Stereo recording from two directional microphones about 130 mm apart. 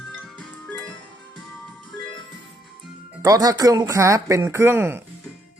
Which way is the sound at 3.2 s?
30° right (ahead or behind).